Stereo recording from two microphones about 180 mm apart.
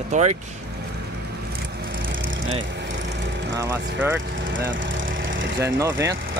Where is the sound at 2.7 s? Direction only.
75° right (ahead or behind).